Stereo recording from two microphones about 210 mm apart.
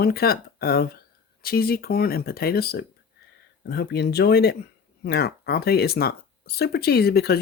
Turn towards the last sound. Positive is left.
turn(degrees=50)  # may be behind; listen again after turning